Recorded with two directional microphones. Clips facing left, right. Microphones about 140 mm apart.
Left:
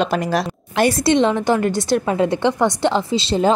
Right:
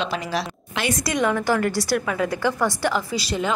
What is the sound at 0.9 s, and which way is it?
A woman's voice, 25° left (ahead or behind).